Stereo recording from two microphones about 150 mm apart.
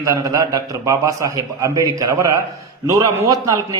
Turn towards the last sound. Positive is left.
turn(degrees=-25)  # may be behind; listen again after turning